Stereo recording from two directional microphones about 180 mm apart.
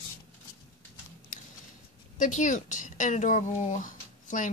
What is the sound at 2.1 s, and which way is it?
Speech, 45° left (ahead or behind).